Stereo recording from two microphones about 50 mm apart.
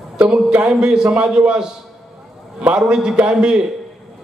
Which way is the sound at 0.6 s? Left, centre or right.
Centre.